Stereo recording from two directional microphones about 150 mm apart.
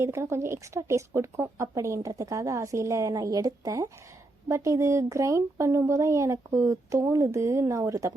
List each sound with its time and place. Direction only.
0.0 s speech: 20° right (ahead or behind)